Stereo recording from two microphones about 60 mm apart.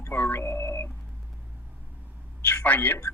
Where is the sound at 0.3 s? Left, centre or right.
Left.